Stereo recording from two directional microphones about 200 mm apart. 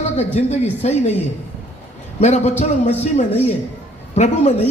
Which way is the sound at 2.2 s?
35° left (ahead or behind).